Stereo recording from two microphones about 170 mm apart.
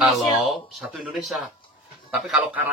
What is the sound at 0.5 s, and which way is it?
Speech, centre (ahead or behind).